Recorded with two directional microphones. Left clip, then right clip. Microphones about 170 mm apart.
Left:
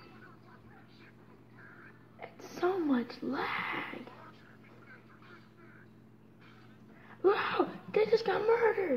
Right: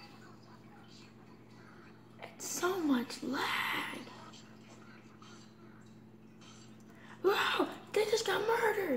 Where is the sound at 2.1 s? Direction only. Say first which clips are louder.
Right 2 dB; 30° left (ahead or behind).